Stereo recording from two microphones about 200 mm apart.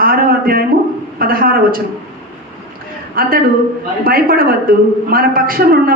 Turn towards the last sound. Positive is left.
turn(degrees=-45)  # may be behind; listen again after turning